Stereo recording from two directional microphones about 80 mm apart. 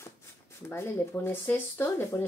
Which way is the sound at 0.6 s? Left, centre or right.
Left.